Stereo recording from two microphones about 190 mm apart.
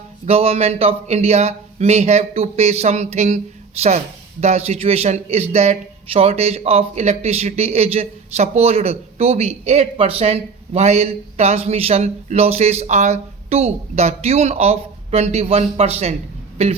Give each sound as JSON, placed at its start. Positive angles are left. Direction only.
{"t": 0.3, "sound": "a man's voice", "side_deg": -30}